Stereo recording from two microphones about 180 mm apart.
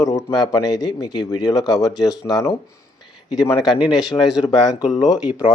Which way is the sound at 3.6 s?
5° right (ahead or behind).